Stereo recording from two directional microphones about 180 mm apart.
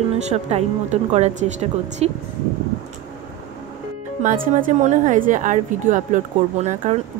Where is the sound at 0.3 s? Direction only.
35° right (ahead or behind).